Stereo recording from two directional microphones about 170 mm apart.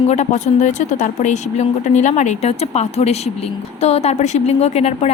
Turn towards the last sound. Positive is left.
turn(degrees=40)  # may be behind; listen again after turning